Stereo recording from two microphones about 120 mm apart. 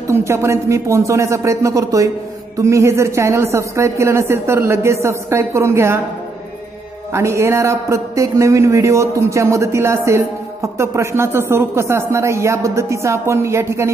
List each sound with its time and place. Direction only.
0.1 s a man's voice: 25° right (ahead or behind)
7.1 s a man's voice: 25° right (ahead or behind)